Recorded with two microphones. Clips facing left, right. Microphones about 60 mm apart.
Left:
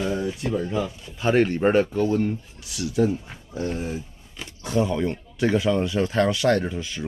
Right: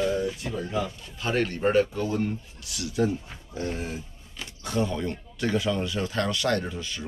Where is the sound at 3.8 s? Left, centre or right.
Centre.